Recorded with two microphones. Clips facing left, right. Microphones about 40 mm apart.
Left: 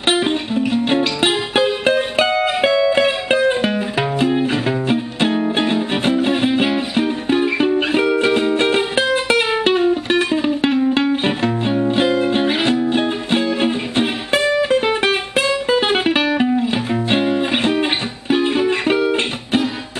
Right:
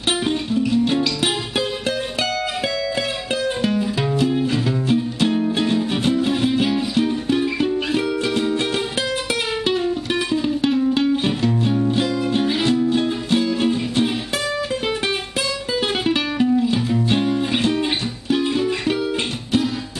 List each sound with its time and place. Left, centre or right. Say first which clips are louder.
0.1 s music: left 3 dB; left